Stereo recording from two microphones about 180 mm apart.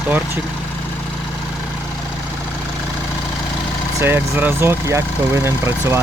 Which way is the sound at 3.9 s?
10° right (ahead or behind).